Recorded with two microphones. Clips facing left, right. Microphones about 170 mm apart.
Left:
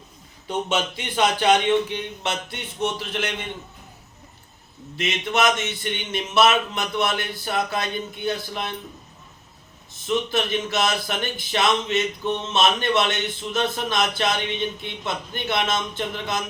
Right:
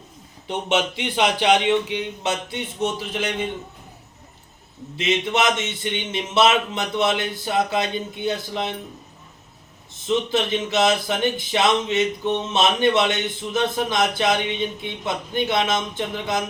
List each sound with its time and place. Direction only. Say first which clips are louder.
0.4 s a man's voice: right 2 dB; 20° right (ahead or behind)
4.9 s a man's voice: right 2 dB; 20° right (ahead or behind)
10.1 s a man's voice: right 2 dB; 20° right (ahead or behind)